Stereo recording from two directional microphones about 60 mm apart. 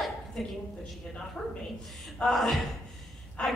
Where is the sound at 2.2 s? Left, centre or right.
Centre.